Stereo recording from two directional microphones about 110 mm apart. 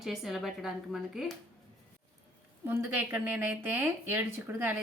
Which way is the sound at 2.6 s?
15° right (ahead or behind).